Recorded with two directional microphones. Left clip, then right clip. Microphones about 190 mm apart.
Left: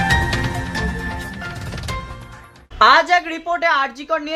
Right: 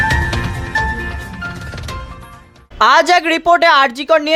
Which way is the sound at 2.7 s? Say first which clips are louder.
Right 2 dB; 50° right (ahead or behind).